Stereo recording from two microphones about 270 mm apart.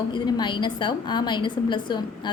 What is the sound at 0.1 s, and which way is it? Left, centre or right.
A woman's voice, centre.